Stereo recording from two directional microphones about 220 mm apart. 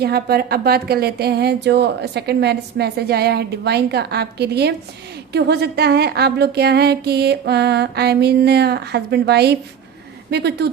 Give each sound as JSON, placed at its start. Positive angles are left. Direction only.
{"t": 0.0, "sound": "speech", "side_deg": -45}